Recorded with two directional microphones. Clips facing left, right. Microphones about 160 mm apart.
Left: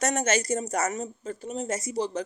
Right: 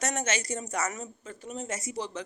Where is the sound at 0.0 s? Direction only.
45° left (ahead or behind).